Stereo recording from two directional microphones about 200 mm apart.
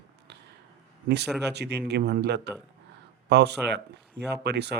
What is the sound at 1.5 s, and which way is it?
Speech, 55° right (ahead or behind).